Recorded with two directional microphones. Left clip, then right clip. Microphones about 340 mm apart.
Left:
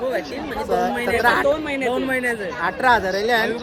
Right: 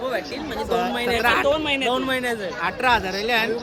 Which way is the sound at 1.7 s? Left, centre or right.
Centre.